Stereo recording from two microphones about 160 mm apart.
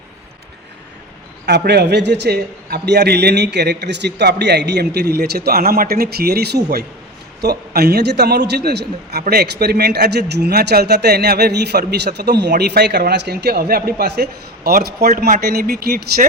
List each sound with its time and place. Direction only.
1.5 s a man's voice: 90° right